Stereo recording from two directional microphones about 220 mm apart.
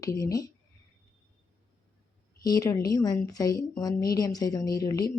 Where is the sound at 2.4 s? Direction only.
15° left (ahead or behind).